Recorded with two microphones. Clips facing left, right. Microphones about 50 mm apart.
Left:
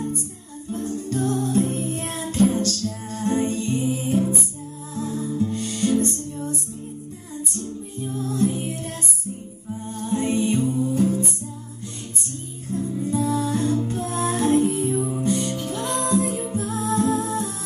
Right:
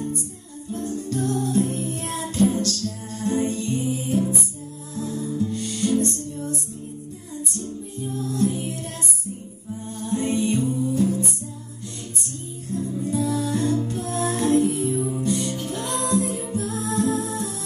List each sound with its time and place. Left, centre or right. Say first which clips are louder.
0.7 s music: left 1 dB; left
8.1 s music: left 1 dB; left
9.8 s music: left 1 dB; centre
10.2 s music: left 1 dB; left
12.7 s music: left 1 dB; centre
15.6 s music: left 1 dB; left
16.3 s music: left 1 dB; centre
16.8 s music: left 2 dB; left